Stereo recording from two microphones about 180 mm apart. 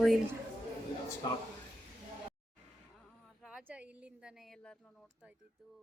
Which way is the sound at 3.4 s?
5° right (ahead or behind).